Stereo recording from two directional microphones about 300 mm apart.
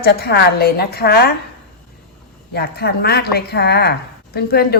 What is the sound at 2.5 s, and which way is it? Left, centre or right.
A woman's voice, left.